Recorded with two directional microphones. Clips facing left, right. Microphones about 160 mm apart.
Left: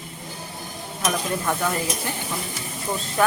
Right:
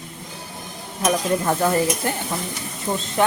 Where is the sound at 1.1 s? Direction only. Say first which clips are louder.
Right 5 dB; 35° right (ahead or behind).